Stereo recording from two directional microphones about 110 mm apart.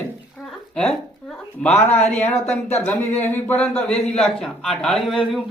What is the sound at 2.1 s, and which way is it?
Speech, 80° left.